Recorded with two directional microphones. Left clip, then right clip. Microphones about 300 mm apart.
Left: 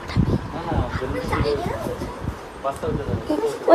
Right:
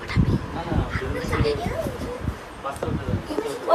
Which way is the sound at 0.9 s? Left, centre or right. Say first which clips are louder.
Left 2 dB; centre.